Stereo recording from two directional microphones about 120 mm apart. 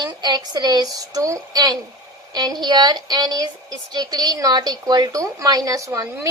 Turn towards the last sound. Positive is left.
turn(degrees=-30)  # may be behind; listen again after turning